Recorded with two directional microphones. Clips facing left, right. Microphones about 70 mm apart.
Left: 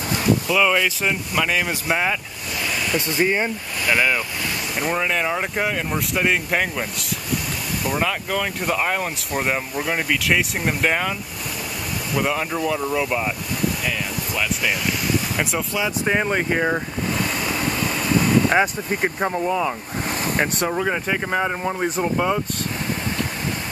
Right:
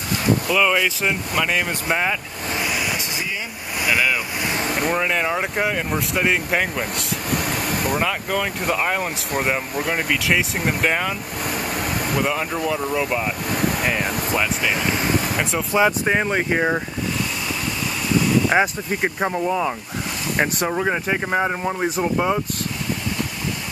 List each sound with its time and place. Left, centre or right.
0.5 s speech: centre
3.2 s speech: left
3.9 s speech: centre
4.6 s boat: right
4.9 s speech: centre
12.2 s speech: centre
14.3 s speech: right
16.3 s speech: centre
18.5 s speech: centre